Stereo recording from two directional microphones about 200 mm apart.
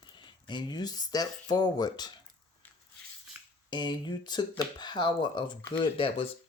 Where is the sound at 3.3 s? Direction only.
10° right (ahead or behind).